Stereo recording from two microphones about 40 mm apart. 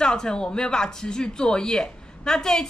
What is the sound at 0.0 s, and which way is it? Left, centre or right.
Speech, left.